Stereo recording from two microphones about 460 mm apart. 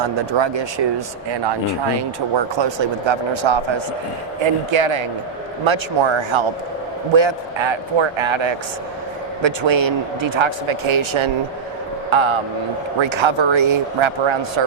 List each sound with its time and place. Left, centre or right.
0.0 s a man's voice: right
4.7 s a man's voice: right
5.6 s a man's voice: right
7.1 s a man's voice: right